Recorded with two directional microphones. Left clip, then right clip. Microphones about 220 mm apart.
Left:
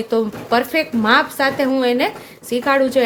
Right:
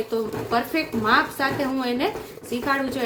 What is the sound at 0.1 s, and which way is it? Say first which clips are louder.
A woman's voice: left 9 dB; 45° left (ahead or behind).